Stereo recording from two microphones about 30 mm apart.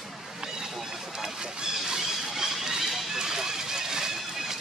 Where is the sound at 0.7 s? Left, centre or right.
Centre.